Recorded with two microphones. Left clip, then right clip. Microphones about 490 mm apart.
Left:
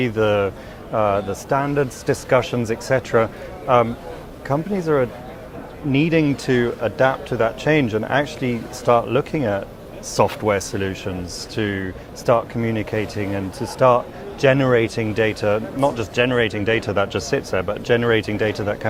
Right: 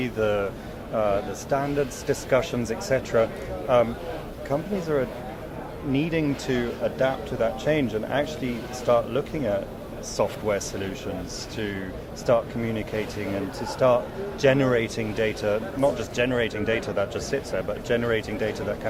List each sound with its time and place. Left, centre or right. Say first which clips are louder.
0.0 s speech: left 6 dB; left